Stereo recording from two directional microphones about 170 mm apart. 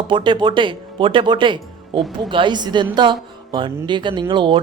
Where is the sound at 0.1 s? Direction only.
30° right (ahead or behind).